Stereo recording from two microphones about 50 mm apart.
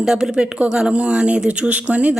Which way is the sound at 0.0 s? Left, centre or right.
Centre.